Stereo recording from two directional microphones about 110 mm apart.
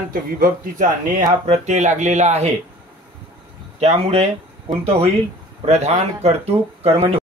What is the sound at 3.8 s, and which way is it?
Speech, 70° right (ahead or behind).